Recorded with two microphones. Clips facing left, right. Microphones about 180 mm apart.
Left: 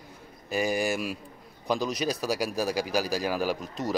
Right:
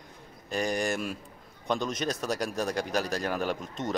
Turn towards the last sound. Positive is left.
turn(degrees=5)  # may be behind; listen again after turning